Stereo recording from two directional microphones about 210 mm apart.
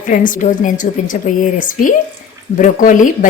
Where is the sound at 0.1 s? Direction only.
40° left (ahead or behind).